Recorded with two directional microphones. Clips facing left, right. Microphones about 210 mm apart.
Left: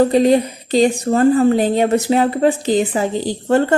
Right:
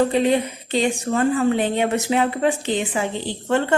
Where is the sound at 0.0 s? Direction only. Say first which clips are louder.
Left 5 dB; 35° left (ahead or behind).